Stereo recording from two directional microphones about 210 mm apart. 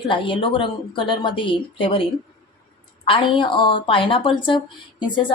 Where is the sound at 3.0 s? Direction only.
25° left (ahead or behind).